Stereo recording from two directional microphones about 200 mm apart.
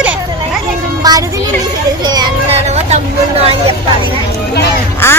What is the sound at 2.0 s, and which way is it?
Children playing, 20° right (ahead or behind).